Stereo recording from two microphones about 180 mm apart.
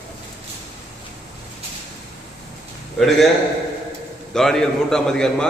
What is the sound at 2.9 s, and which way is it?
Speech, centre (ahead or behind).